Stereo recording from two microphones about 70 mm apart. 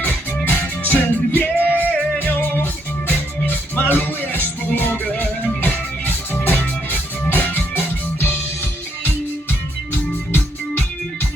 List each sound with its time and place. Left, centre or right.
0.4 s music: left